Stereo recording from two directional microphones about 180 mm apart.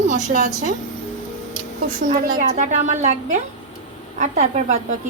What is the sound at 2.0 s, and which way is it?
A woman's voice, 45° right (ahead or behind).